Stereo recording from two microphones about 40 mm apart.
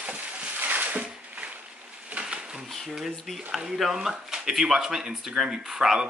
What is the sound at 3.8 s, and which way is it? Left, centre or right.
Speech, centre.